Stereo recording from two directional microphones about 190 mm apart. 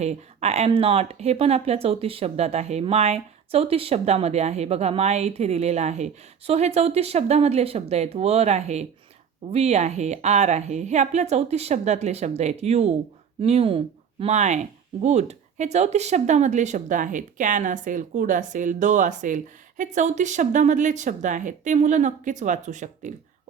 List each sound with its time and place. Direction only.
0.0 s speech: 35° right (ahead or behind)